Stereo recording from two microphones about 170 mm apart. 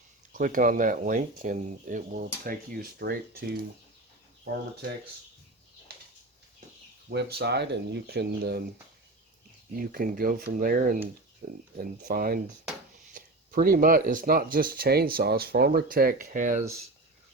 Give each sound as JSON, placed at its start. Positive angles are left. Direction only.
{"t": 0.3, "sound": "speech", "side_deg": -55}
{"t": 5.9, "sound": "a sound", "side_deg": -65}
{"t": 7.1, "sound": "speech", "side_deg": -75}
{"t": 9.7, "sound": "speech", "side_deg": -55}
{"t": 11.8, "sound": "speech", "side_deg": -60}